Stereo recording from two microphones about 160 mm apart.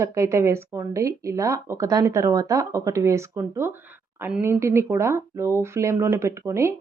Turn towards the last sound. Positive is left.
turn(degrees=-15)  # may be behind; listen again after turning